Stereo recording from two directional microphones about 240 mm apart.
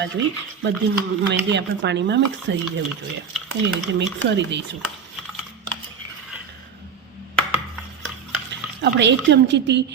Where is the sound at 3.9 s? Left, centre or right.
Right.